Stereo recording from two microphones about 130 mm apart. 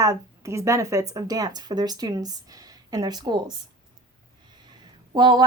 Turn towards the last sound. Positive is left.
turn(degrees=-35)  # may be behind; listen again after turning